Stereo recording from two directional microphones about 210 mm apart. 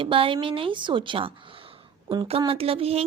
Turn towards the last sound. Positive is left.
turn(degrees=-30)  # may be behind; listen again after turning